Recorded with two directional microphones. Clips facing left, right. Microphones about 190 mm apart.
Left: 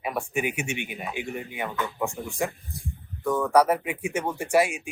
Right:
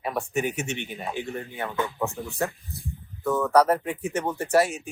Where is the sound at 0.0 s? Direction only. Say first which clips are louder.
Right 1 dB; 10° left (ahead or behind).